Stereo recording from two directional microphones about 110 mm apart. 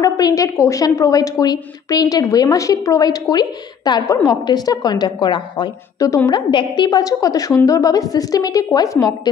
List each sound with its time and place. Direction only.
0.0 s a woman's voice: 30° left (ahead or behind)
5.9 s a woman's voice: 25° left (ahead or behind)
6.3 s a woman's voice: 40° left (ahead or behind)